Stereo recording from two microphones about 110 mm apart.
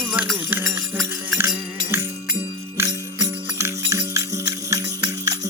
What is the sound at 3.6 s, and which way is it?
Music, 30° right (ahead or behind).